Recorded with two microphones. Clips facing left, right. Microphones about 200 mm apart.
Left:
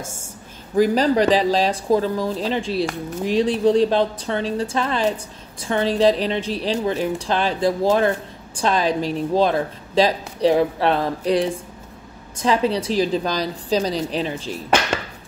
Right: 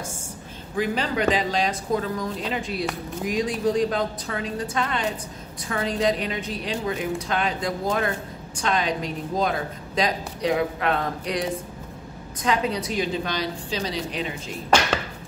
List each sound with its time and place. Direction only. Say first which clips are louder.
0.7 s a woman's voice: left 8 dB; 40° left (ahead or behind)